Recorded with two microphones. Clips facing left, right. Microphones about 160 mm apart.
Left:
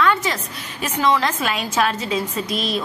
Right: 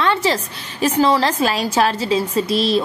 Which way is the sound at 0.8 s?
35° right (ahead or behind).